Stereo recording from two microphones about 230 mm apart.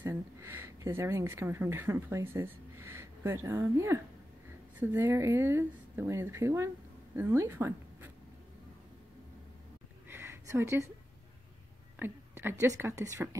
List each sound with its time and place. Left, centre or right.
0.0 s a woman's voice: centre
10.0 s a sound: centre
12.0 s a woman's voice: centre